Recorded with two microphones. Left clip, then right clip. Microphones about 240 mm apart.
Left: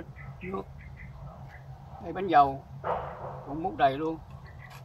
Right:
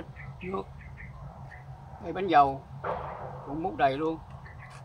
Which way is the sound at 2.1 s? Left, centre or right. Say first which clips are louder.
Even; centre.